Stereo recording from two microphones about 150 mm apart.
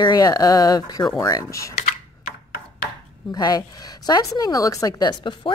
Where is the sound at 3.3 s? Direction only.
25° left (ahead or behind).